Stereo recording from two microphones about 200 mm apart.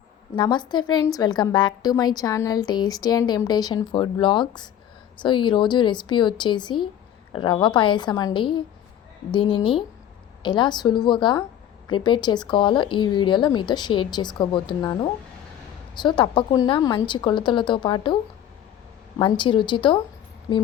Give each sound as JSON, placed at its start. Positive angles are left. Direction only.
{"t": 0.3, "sound": "a woman's voice", "side_deg": 25}
{"t": 19.2, "sound": "a woman's voice", "side_deg": 25}